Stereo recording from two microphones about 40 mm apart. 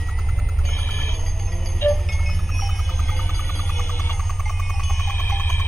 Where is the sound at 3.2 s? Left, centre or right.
Left.